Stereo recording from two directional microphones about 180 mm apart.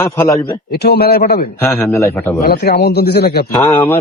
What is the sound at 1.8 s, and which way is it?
Speech, 15° left (ahead or behind).